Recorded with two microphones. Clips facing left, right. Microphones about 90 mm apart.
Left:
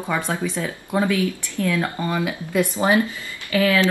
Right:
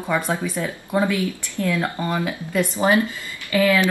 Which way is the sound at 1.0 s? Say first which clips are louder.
Left 3 dB; 20° right (ahead or behind).